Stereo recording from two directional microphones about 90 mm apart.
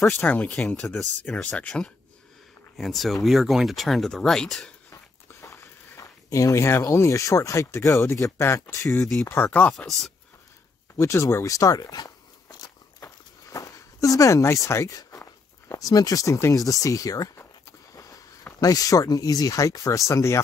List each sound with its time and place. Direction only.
0.1 s speech: 15° left (ahead or behind)
2.8 s speech: centre (ahead or behind)
5.3 s a sound: 35° left (ahead or behind)
6.9 s speech: 30° left (ahead or behind); by 9.8 s 15° left (ahead or behind)
11.0 s a sound: 35° left (ahead or behind)
15.7 s speech: 40° left (ahead or behind)
18.6 s speech: 40° left (ahead or behind)